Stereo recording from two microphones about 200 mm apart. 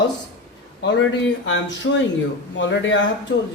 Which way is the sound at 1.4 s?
65° left (ahead or behind).